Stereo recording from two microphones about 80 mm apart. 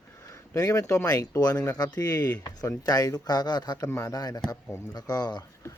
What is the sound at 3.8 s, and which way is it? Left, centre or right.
Speech, left.